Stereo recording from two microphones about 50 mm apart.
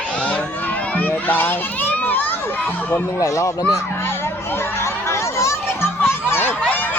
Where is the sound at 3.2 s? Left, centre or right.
Left.